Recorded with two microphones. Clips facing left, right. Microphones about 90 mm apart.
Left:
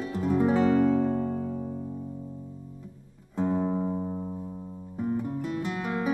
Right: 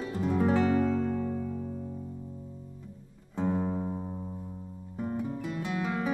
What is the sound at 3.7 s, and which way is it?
Music, 15° left (ahead or behind).